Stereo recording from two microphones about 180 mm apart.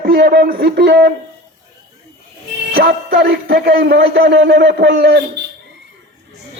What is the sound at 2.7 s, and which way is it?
A man's voice, 60° right (ahead or behind).